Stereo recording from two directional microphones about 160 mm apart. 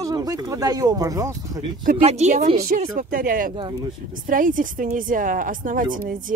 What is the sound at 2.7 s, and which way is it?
A woman's voice, 60° right (ahead or behind).